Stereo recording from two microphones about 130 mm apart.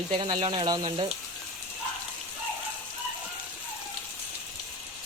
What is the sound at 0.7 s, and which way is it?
Speech, 30° right (ahead or behind).